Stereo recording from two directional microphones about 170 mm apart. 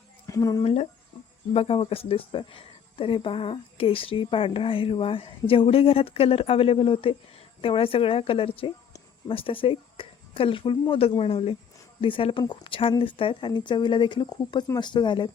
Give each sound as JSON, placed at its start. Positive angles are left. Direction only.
{"t": 0.3, "sound": "speech", "side_deg": 20}
{"t": 0.6, "sound": "speech", "side_deg": 40}